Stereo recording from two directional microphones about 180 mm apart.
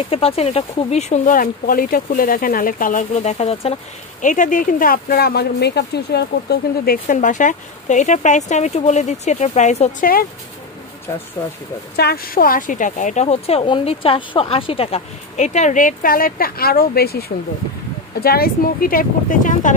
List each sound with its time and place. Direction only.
0.1 s speech: 30° left (ahead or behind); by 10.2 s 50° left (ahead or behind)
12.0 s speech: 60° left (ahead or behind)